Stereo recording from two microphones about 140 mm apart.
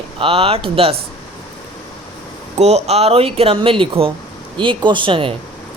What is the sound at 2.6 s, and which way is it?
Speech, 50° right (ahead or behind).